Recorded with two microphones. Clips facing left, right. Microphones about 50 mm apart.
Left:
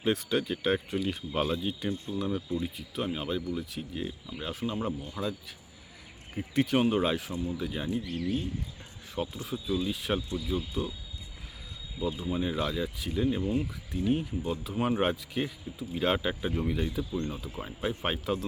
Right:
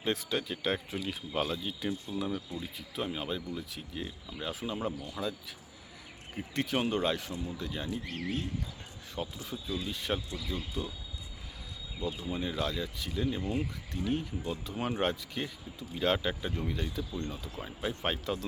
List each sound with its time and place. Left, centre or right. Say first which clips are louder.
0.0 s speech: left 4 dB; centre
8.0 s speech: left 4 dB; right
9.2 s speech: left 4 dB; centre
9.6 s speech: left 6 dB; left
9.9 s speech: left 4 dB; centre
11.9 s speech: left 4 dB; centre